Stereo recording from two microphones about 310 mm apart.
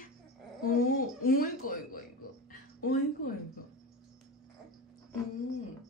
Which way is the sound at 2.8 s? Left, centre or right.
Left.